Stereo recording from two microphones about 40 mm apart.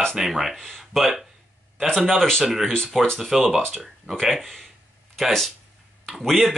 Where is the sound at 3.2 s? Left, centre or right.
Centre.